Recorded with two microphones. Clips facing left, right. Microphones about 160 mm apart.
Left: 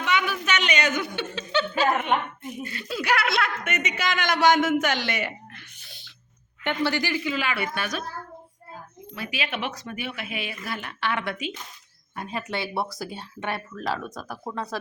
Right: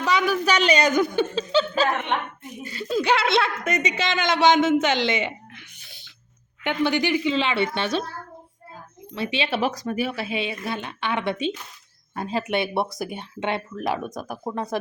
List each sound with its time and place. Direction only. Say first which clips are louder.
0.0 s a woman's voice: right 5 dB; 35° right (ahead or behind)
1.5 s speech: right 1 dB; 30° right (ahead or behind)
3.6 s speech: right 4 dB; 35° right (ahead or behind)
6.7 s speech: right 4 dB; 20° right (ahead or behind)
9.1 s speech: right 6 dB; 25° right (ahead or behind)